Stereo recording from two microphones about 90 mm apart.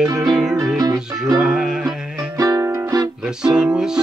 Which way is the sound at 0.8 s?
45° right (ahead or behind).